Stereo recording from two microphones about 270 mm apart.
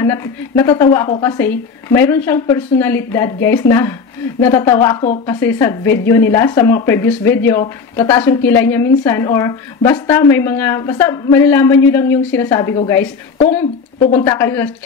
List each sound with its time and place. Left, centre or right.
0.0 s a woman's voice: centre